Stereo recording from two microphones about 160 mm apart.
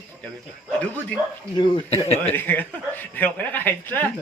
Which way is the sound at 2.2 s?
10° left (ahead or behind).